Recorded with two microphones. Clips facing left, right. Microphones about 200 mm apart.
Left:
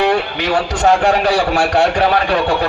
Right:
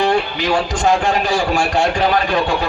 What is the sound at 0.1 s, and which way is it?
A man's voice, 70° left (ahead or behind).